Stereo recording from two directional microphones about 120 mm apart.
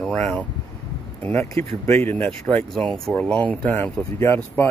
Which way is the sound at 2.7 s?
5° left (ahead or behind).